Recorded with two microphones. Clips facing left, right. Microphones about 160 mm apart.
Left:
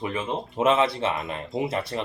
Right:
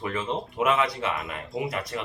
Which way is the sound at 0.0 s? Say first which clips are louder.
Left 1 dB; 15° left (ahead or behind).